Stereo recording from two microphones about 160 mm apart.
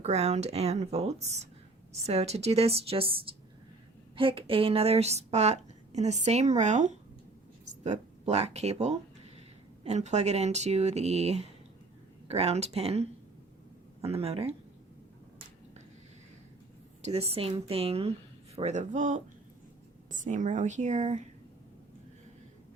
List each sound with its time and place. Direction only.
0.0 s speech: 45° right (ahead or behind)
17.0 s speech: 40° right (ahead or behind)